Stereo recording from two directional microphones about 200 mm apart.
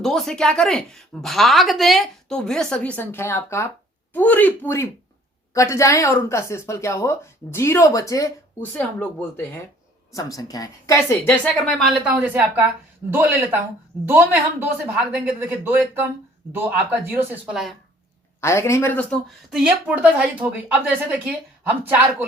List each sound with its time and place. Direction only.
0.0 s a woman's voice: centre (ahead or behind)
10.1 s speech: 15° left (ahead or behind)
12.0 s speech: 10° right (ahead or behind)
15.1 s speech: 10° right (ahead or behind)
18.3 s speech: 15° left (ahead or behind)
19.5 s speech: 5° right (ahead or behind)